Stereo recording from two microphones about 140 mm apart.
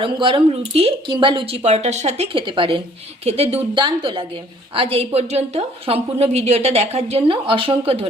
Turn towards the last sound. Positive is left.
turn(degrees=-40)  # may be behind; listen again after turning